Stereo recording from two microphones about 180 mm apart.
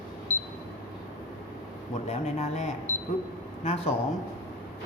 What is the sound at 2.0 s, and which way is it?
A man's voice, 35° left (ahead or behind).